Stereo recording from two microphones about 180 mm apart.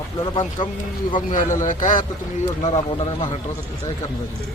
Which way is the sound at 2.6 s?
35° left (ahead or behind).